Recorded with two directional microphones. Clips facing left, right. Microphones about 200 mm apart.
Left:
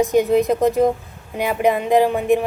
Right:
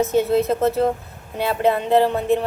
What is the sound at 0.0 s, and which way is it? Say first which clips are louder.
Speech: left 2 dB; 15° left (ahead or behind).